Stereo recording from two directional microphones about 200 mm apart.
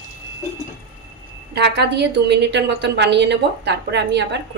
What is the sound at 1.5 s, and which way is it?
A woman's voice, 55° right (ahead or behind).